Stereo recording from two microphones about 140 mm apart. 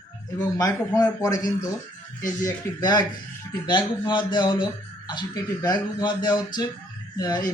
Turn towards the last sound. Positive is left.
turn(degrees=25)  # may be behind; listen again after turning